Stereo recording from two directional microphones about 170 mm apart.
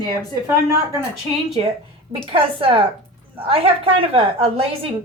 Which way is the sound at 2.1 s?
30° right (ahead or behind).